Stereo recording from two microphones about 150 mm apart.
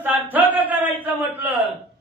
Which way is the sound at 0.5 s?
10° right (ahead or behind).